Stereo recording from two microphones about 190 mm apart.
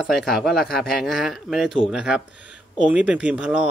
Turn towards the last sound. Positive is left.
turn(degrees=-5)  # may be behind; listen again after turning